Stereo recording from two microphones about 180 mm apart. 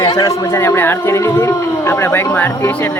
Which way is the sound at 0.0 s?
20° left (ahead or behind).